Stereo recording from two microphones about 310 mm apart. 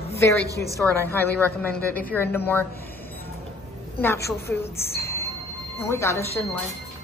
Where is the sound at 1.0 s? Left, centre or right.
Centre.